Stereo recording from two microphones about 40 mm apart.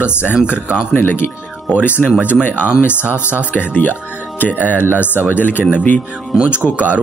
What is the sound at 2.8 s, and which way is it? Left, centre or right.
Speech, left.